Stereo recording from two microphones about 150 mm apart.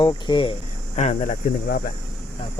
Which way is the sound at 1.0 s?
55° left (ahead or behind).